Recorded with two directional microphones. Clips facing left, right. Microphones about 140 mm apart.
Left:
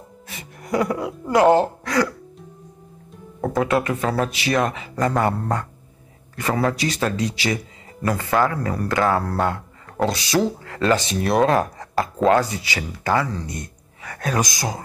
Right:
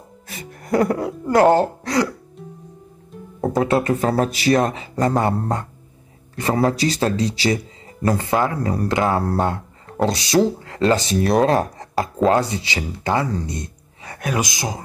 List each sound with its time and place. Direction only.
0.3 s speech: 45° right (ahead or behind)
3.3 s speech: 30° right (ahead or behind)
13.5 s a sound: 25° right (ahead or behind)